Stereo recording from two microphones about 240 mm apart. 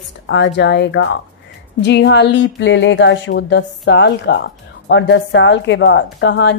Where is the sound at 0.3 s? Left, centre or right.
Left.